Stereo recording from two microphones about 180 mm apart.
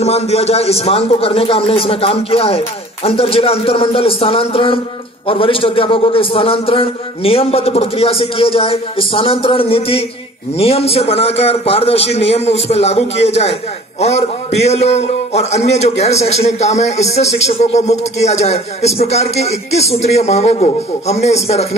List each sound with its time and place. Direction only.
0.0 s a man's voice: 35° left (ahead or behind)